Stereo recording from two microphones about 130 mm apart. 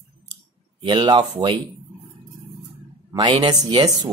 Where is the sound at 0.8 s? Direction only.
35° right (ahead or behind).